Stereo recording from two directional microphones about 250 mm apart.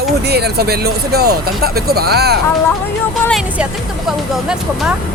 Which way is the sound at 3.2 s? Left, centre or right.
Centre.